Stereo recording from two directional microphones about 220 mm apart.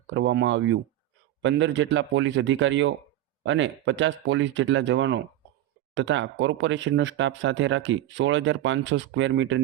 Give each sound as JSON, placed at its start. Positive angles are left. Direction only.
{"t": 0.1, "sound": "speech", "side_deg": -55}